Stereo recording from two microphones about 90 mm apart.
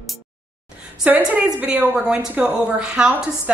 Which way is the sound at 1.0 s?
20° right (ahead or behind).